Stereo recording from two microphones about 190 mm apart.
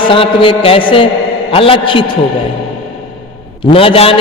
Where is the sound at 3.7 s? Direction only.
30° left (ahead or behind).